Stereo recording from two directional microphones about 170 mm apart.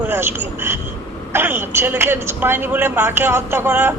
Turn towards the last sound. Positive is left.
turn(degrees=-15)  # may be behind; listen again after turning